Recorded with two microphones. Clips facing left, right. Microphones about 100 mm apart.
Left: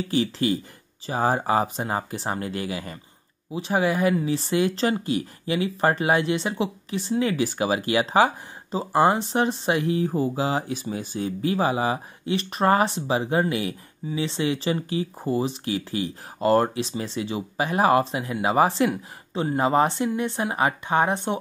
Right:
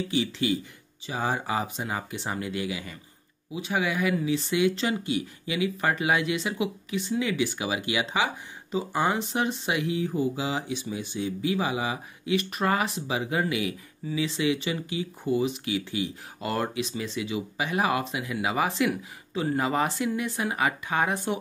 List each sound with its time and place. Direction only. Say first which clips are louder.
0.1 s speech: left 5 dB; 40° left (ahead or behind); by 21.4 s 25° left (ahead or behind)